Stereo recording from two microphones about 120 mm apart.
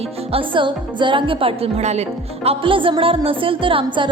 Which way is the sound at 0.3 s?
45° right (ahead or behind).